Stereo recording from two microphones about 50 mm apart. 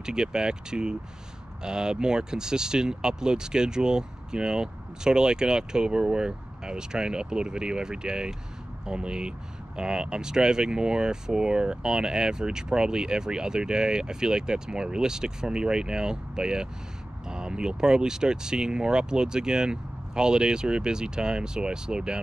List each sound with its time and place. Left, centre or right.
0.0 s speech: centre